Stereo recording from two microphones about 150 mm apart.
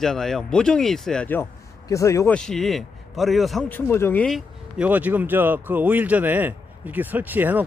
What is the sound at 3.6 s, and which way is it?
Speech, 15° left (ahead or behind).